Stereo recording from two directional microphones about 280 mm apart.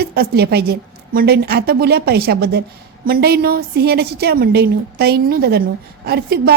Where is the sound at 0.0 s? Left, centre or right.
Right.